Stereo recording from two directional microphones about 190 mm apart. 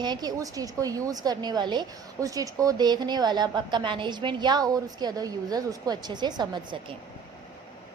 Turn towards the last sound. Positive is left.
turn(degrees=-25)  # may be behind; listen again after turning